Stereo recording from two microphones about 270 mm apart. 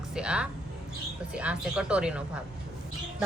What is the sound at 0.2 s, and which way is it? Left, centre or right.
A woman's voice, centre.